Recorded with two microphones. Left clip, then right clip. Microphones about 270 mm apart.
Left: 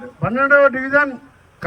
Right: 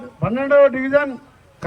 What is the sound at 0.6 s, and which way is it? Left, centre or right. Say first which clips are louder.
Speech: even; centre.